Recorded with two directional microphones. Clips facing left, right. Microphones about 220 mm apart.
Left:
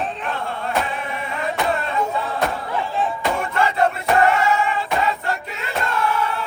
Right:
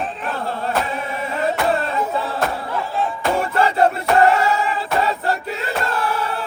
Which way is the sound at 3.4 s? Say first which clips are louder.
Right 3 dB; 35° right (ahead or behind).